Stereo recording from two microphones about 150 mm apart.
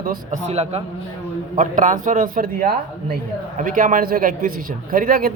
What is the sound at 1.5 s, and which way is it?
A man's voice, 55° right (ahead or behind).